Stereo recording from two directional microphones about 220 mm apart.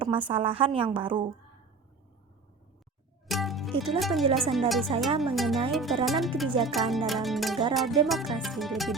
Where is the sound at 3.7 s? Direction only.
25° right (ahead or behind).